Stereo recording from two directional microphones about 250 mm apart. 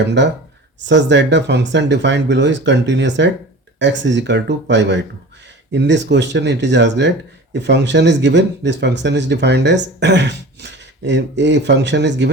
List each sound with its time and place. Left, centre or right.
0.0 s speech: right